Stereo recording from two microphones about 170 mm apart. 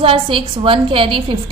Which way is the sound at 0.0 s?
30° right (ahead or behind).